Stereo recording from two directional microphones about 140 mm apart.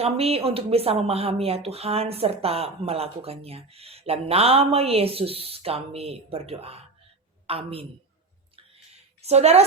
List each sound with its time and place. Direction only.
0.0 s a man's voice: 45° right (ahead or behind)
9.2 s speech: 50° right (ahead or behind)